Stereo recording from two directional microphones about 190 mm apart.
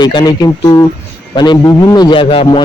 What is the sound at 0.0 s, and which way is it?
Speech, 20° left (ahead or behind).